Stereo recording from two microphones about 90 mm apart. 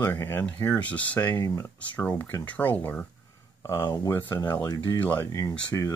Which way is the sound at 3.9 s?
35° left (ahead or behind).